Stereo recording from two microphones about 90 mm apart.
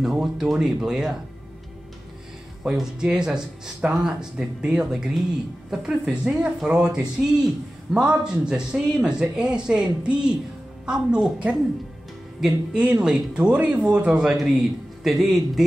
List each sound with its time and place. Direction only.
0.0 s speech: 5° right (ahead or behind)
2.6 s speech: 5° right (ahead or behind)
12.4 s speech: 5° right (ahead or behind)